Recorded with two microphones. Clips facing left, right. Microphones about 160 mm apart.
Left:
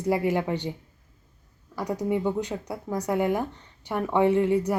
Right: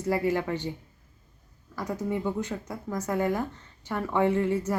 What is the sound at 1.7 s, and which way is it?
A woman's voice, 15° left (ahead or behind).